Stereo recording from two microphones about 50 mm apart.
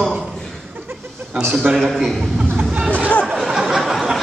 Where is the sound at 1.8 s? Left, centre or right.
Centre.